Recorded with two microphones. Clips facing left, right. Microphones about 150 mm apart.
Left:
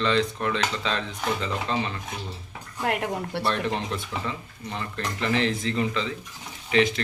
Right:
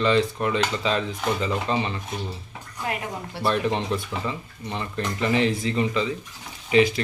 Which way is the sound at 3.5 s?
Centre (ahead or behind).